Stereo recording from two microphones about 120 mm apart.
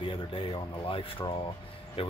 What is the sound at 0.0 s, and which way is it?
Speech, 45° left (ahead or behind).